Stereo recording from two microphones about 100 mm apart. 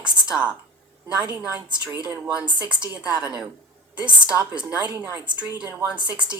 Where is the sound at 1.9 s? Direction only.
15° right (ahead or behind).